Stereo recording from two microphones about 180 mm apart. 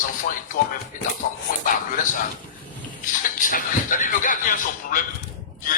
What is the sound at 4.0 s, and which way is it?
A man's voice, 50° left (ahead or behind).